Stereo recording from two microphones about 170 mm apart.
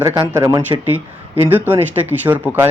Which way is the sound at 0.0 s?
25° right (ahead or behind).